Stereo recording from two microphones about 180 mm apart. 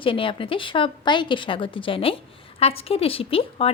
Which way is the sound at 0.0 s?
30° left (ahead or behind).